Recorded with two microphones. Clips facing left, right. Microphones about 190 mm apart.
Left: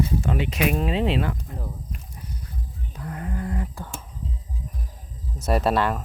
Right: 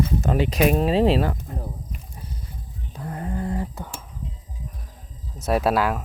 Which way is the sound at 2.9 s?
30° right (ahead or behind).